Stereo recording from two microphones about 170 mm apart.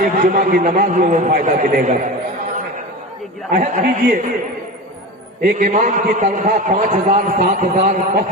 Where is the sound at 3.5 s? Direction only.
50° right (ahead or behind).